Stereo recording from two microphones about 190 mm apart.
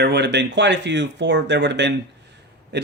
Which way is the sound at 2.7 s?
65° right (ahead or behind).